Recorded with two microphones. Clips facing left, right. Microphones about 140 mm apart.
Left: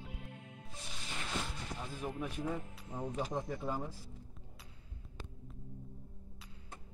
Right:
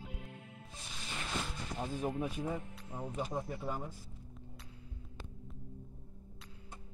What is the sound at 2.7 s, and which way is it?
Speech, 5° right (ahead or behind).